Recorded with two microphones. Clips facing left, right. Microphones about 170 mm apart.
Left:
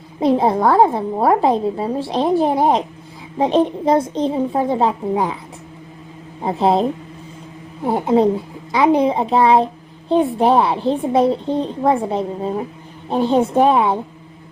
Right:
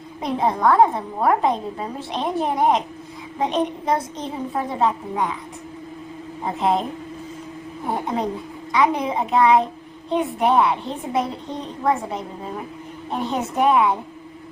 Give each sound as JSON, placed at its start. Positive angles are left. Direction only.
{"t": 0.2, "sound": "a woman's voice", "side_deg": 30}
{"t": 6.4, "sound": "a woman's voice", "side_deg": 30}
{"t": 7.9, "sound": "a woman's voice", "side_deg": 30}